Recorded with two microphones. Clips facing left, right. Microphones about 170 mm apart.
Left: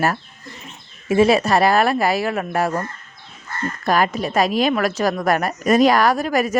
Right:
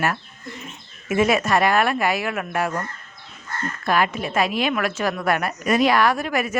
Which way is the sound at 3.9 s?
40° left (ahead or behind).